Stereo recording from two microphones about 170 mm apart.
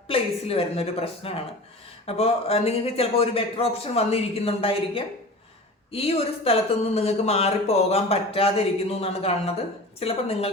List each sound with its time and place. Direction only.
0.1 s speech: 35° left (ahead or behind)